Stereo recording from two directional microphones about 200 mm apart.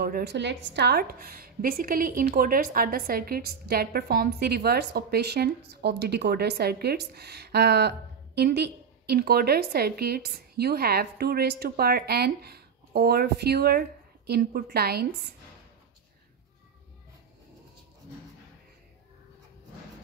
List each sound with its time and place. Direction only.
0.0 s a woman's voice: 50° right (ahead or behind)